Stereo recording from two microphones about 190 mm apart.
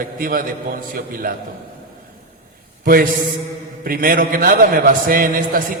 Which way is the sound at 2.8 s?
50° right (ahead or behind).